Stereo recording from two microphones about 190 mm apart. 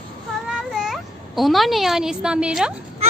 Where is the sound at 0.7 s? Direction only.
Centre (ahead or behind).